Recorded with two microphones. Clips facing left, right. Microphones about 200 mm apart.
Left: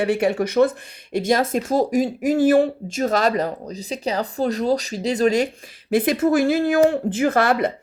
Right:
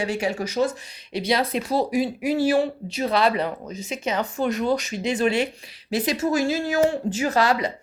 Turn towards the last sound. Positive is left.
turn(degrees=55)  # may be behind; listen again after turning